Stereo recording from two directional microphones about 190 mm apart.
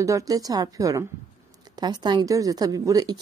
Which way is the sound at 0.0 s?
15° right (ahead or behind).